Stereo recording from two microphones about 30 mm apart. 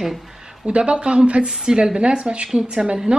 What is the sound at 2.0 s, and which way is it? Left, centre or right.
Speech, right.